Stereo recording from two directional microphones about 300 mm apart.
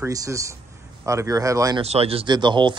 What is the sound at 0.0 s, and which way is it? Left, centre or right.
Speech, centre.